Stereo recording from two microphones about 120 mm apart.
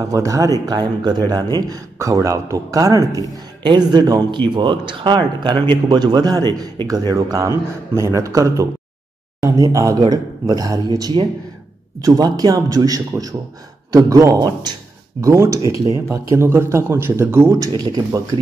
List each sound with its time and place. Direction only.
0.0 s speech: 30° right (ahead or behind)
17.7 s speech: 35° right (ahead or behind)